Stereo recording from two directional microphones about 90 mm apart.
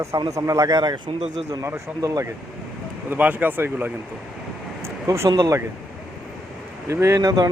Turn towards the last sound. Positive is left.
turn(degrees=-45)  # may be behind; listen again after turning